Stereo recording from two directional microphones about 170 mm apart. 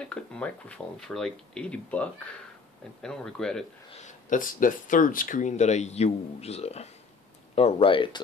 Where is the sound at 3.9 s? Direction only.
45° left (ahead or behind).